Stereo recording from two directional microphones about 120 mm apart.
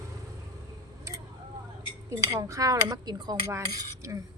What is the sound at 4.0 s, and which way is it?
Dishes, 25° right (ahead or behind).